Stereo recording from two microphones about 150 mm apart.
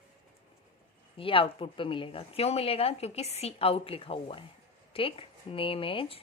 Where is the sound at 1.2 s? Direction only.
35° left (ahead or behind).